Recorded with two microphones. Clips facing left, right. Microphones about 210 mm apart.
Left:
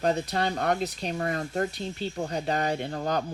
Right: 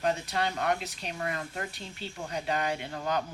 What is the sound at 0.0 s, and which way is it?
Speech, 35° left (ahead or behind).